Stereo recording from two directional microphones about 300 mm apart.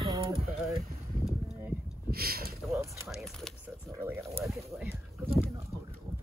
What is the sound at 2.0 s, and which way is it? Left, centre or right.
Speech, right.